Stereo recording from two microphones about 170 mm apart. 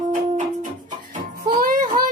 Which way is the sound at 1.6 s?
55° right (ahead or behind).